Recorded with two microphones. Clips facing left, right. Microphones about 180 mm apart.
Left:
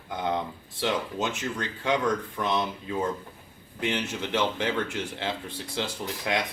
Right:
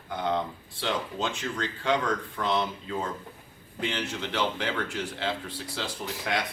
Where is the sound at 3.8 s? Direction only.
15° left (ahead or behind).